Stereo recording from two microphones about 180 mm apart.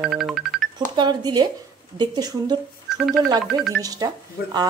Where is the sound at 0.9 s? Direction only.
25° right (ahead or behind).